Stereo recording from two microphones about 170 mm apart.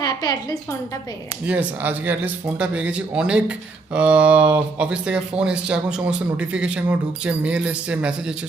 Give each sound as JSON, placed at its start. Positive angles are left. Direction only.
{"t": 0.0, "sound": "a woman's voice", "side_deg": 25}
{"t": 1.5, "sound": "speech", "side_deg": -10}